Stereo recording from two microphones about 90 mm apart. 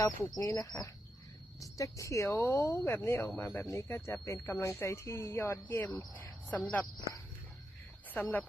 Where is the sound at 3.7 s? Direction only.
30° left (ahead or behind).